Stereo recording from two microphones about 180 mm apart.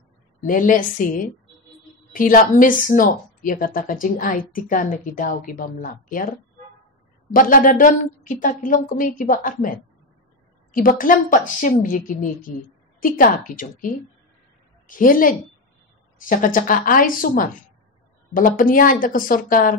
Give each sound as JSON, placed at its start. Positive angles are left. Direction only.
{"t": 0.5, "sound": "a woman's voice", "side_deg": 50}
{"t": 7.2, "sound": "a woman's voice", "side_deg": 50}
{"t": 14.9, "sound": "a woman's voice", "side_deg": 50}